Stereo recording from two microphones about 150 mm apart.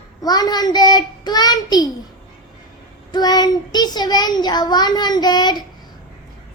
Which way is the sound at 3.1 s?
25° left (ahead or behind).